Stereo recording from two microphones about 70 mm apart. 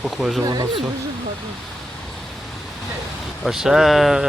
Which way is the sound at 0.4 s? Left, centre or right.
Right.